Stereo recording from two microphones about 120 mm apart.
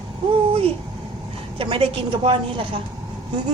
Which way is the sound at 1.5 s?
50° right (ahead or behind).